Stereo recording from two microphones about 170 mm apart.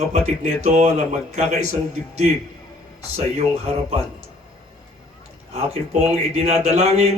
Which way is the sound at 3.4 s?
40° right (ahead or behind).